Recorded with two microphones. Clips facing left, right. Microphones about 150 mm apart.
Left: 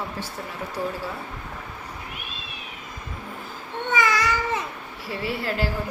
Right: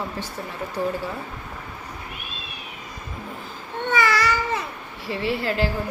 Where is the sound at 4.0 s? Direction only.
15° left (ahead or behind).